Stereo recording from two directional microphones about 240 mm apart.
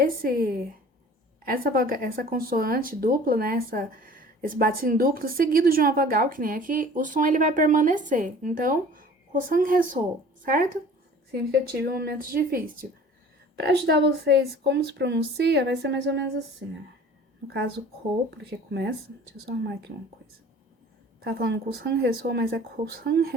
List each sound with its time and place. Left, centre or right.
0.0 s speech: right
17.5 s speech: right
21.2 s speech: right